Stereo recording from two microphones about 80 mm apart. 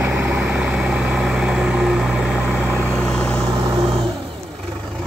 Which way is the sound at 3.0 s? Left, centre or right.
Centre.